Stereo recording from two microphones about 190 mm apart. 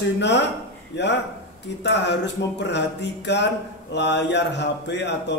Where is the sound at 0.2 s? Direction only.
65° left (ahead or behind).